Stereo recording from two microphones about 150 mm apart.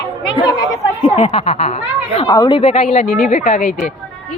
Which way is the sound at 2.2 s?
25° left (ahead or behind).